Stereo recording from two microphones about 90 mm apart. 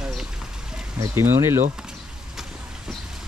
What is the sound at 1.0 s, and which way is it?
Speech, 30° right (ahead or behind).